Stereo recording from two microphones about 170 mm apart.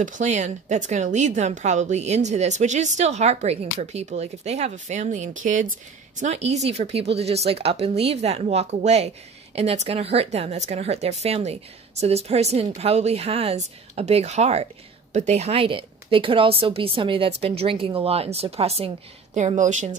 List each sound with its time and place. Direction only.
0.0 s a woman's voice: 45° right (ahead or behind)